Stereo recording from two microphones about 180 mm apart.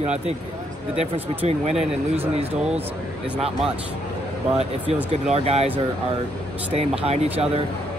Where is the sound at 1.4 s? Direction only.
35° right (ahead or behind).